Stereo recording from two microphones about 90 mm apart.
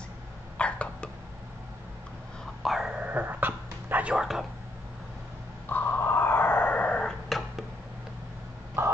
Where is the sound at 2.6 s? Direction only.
5° right (ahead or behind).